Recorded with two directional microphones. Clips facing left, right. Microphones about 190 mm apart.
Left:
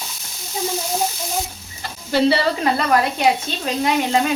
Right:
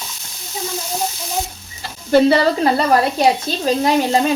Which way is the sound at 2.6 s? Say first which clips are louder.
Right 3 dB; 35° right (ahead or behind).